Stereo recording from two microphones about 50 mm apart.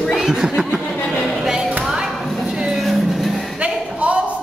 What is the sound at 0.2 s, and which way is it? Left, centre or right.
Chuckle, centre.